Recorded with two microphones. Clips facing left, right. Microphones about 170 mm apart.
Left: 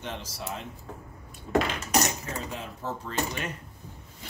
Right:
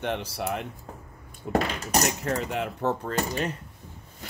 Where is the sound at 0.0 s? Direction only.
65° right (ahead or behind).